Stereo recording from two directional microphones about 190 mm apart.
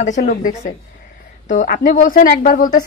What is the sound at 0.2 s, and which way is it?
A woman's voice, 50° left (ahead or behind).